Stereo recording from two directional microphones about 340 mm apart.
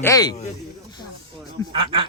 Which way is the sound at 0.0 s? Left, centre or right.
Centre.